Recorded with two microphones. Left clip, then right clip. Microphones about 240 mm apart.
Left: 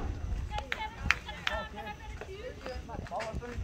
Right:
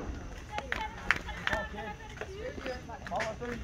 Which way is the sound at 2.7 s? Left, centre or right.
Right.